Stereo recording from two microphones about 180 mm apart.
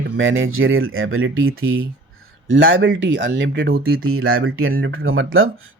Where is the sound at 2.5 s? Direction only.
90° right.